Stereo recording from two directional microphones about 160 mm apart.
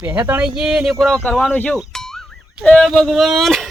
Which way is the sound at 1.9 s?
5° left (ahead or behind).